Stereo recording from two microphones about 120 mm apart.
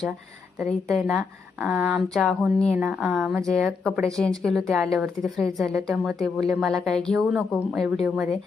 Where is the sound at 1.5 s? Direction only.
15° right (ahead or behind).